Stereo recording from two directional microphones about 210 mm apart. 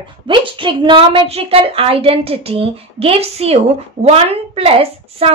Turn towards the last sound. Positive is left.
turn(degrees=-30)  # may be behind; listen again after turning